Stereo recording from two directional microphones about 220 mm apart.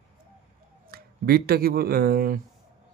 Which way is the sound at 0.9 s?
45° right (ahead or behind).